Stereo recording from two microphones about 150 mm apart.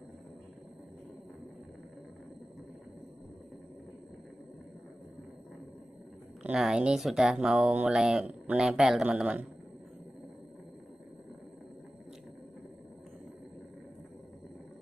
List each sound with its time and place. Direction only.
6.4 s speech: 5° right (ahead or behind)